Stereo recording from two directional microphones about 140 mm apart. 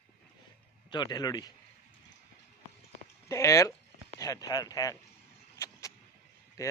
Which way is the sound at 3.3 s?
20° left (ahead or behind).